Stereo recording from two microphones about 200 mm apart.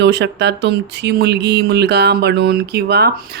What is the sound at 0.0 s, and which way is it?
Speech, 60° right (ahead or behind).